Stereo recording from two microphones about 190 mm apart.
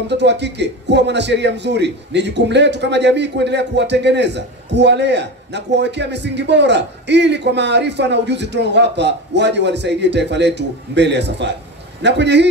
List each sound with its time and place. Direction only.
0.1 s a man's voice: 65° right (ahead or behind)